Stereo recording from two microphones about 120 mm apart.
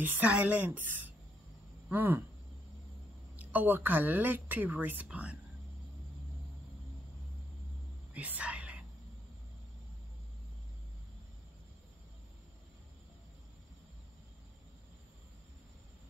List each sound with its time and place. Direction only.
0.0 s a woman's voice: 15° right (ahead or behind)
3.3 s a woman's voice: 15° right (ahead or behind)
8.1 s whispering: 10° right (ahead or behind)